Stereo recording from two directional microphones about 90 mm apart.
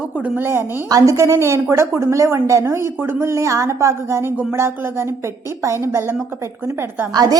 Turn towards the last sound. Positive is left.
turn(degrees=-45)  # may be behind; listen again after turning